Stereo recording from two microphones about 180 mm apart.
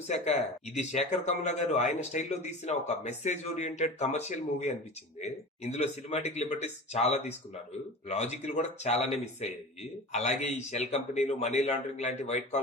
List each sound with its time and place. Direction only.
0.8 s speech: 40° left (ahead or behind)